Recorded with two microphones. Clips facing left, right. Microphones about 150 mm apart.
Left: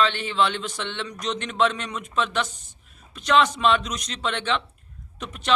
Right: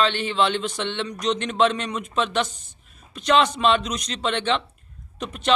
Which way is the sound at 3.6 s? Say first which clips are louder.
Right 1 dB; 25° right (ahead or behind).